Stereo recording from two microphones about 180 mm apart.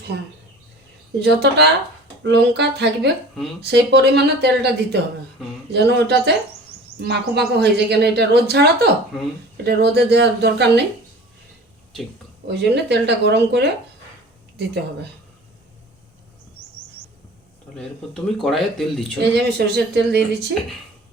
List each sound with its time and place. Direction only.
1.2 s a man's voice: 70° right (ahead or behind)
12.5 s a man's voice: 70° right (ahead or behind)
17.7 s speech: 5° left (ahead or behind)
19.2 s a man's voice: 65° right (ahead or behind)